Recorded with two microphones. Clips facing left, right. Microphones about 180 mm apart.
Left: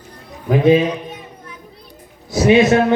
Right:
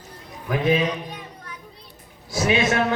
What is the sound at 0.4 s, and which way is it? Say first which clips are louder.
Speech: left 9 dB; 25° left (ahead or behind).